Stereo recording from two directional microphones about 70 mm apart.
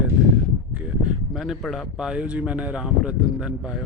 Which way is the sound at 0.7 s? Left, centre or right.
Right.